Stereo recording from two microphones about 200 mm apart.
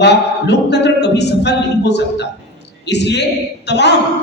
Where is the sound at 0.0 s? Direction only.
60° left (ahead or behind).